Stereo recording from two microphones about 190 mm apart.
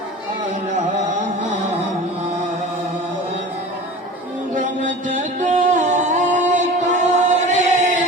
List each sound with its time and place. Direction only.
4.5 s music: 40° right (ahead or behind)